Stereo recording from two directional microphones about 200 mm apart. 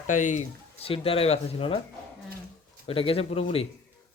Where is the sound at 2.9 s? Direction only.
30° left (ahead or behind).